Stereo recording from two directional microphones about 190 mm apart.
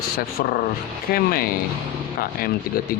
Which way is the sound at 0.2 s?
50° left (ahead or behind).